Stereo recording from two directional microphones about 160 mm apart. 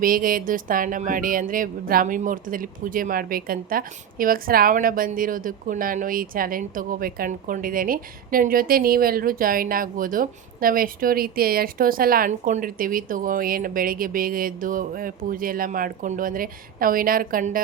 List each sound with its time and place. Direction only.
0.0 s speech: 60° right (ahead or behind)